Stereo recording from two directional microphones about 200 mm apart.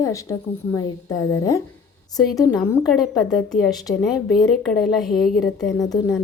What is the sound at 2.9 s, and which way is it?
A woman's voice, centre (ahead or behind).